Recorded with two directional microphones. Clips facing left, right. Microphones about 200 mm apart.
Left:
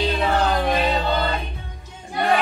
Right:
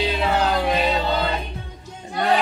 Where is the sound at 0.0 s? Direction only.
5° right (ahead or behind).